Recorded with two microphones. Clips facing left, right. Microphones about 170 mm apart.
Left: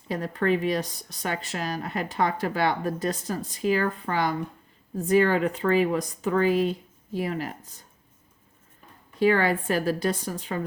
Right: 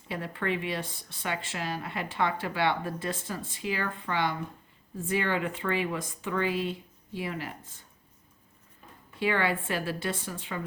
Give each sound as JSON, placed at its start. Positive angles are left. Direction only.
{"t": 0.1, "sound": "speech", "side_deg": 40}
{"t": 9.1, "sound": "speech", "side_deg": 40}